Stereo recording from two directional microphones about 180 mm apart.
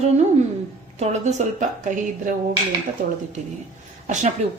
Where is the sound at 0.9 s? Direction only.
40° right (ahead or behind).